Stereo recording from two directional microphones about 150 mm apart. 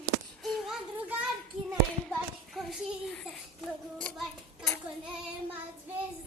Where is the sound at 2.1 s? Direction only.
Centre (ahead or behind).